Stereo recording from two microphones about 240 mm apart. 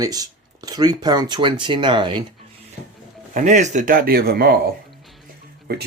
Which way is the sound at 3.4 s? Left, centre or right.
Right.